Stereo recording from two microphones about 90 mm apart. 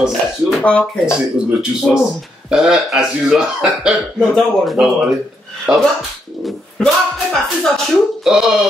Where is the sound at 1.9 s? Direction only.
10° right (ahead or behind).